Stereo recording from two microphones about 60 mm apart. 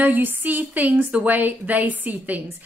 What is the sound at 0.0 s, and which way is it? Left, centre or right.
A woman's voice, right.